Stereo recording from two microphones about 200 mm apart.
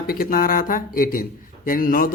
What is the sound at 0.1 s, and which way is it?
A man's voice, 45° left (ahead or behind).